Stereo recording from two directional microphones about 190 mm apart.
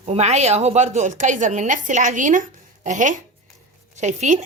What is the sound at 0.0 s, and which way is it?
A woman's voice, 35° right (ahead or behind).